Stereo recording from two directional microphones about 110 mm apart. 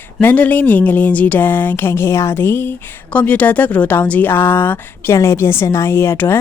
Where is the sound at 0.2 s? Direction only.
15° left (ahead or behind).